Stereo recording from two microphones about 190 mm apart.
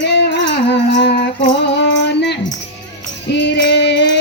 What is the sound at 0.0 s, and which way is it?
Music, 65° left (ahead or behind).